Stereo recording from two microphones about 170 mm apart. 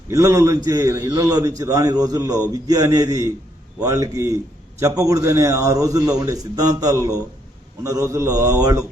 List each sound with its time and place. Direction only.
0.1 s a man's voice: 20° right (ahead or behind)